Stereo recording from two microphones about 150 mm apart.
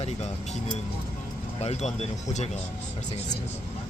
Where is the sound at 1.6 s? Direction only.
45° left (ahead or behind).